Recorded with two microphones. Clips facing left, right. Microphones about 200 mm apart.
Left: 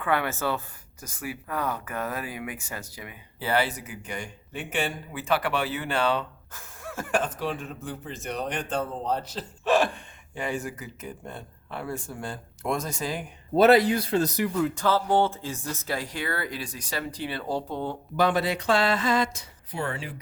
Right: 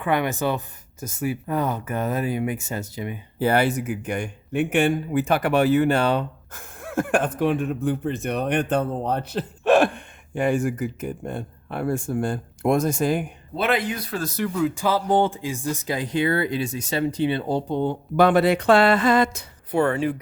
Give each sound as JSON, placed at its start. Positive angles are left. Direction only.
{"t": 0.0, "sound": "speech", "side_deg": -15}
{"t": 3.3, "sound": "speech", "side_deg": -50}
{"t": 13.6, "sound": "speech", "side_deg": 40}
{"t": 14.5, "sound": "speech", "side_deg": 0}
{"t": 14.8, "sound": "speech", "side_deg": -15}
{"t": 18.2, "sound": "speech", "side_deg": -60}